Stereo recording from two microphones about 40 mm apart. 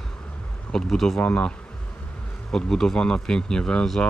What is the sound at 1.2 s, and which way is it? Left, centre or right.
Speech, left.